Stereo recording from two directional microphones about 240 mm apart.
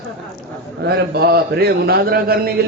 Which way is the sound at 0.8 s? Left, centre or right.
Right.